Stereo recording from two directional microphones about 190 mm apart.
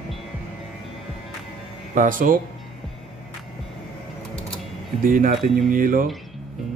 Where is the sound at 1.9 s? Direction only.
45° right (ahead or behind).